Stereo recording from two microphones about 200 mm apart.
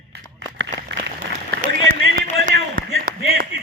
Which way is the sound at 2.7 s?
45° right (ahead or behind).